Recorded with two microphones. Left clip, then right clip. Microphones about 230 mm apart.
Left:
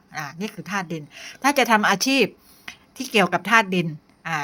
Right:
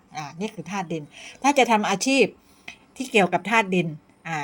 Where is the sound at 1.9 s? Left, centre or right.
Left.